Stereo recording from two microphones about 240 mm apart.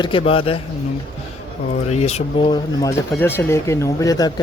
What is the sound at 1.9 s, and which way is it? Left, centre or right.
Speech, left.